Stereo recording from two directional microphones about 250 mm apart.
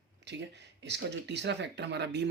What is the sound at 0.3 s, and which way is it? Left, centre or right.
Speech, right.